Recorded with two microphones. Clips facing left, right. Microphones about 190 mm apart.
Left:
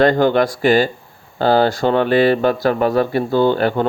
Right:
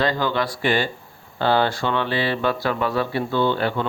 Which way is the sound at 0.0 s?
55° left (ahead or behind).